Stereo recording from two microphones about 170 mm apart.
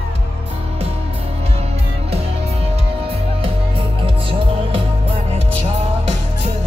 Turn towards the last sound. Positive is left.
turn(degrees=-40)  # may be behind; listen again after turning